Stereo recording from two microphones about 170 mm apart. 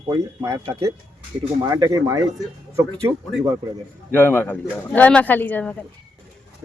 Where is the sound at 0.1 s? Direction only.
20° right (ahead or behind).